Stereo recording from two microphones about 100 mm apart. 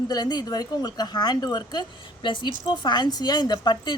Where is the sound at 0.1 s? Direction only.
45° left (ahead or behind).